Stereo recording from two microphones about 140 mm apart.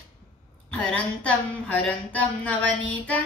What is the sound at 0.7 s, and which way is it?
Female singing, 5° left (ahead or behind).